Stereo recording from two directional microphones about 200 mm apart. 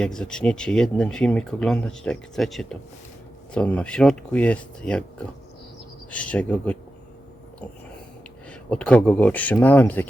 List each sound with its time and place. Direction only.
0.0 s speech: 5° left (ahead or behind)
6.1 s speech: 5° left (ahead or behind)
8.7 s speech: 5° left (ahead or behind)